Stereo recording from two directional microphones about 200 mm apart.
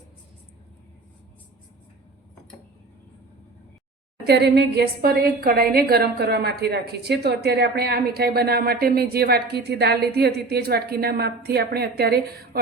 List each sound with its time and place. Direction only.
4.3 s a woman's voice: 55° right (ahead or behind)